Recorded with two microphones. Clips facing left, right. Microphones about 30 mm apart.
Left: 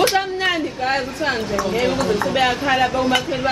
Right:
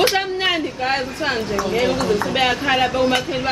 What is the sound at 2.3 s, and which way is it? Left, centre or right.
A woman's voice, centre.